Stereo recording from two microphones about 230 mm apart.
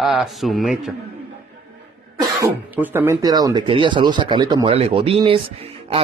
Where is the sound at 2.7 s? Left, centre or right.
Centre.